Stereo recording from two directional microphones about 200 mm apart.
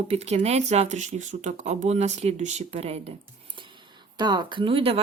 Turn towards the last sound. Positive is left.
turn(degrees=-30)  # may be behind; listen again after turning